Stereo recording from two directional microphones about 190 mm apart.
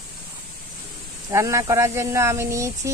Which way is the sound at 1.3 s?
15° right (ahead or behind).